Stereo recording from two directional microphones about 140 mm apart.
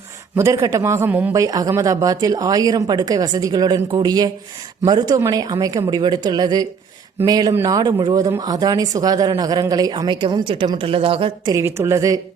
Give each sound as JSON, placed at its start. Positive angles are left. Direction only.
{"t": 0.3, "sound": "speech", "side_deg": -20}
{"t": 1.3, "sound": "a woman's voice", "side_deg": -25}
{"t": 11.4, "sound": "speech", "side_deg": -20}